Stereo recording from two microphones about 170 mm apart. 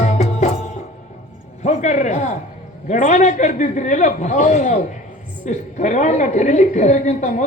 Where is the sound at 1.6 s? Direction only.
45° left (ahead or behind).